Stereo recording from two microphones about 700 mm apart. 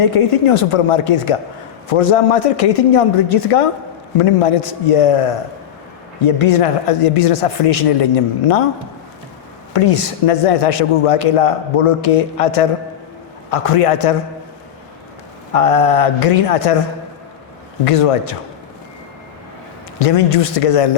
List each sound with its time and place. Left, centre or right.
0.0 s a man's voice: left
9.7 s a man's voice: left
15.5 s a man's voice: left
17.8 s a man's voice: left
20.1 s a man's voice: left